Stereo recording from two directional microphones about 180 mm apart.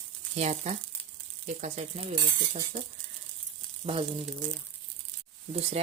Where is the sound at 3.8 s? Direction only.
30° right (ahead or behind).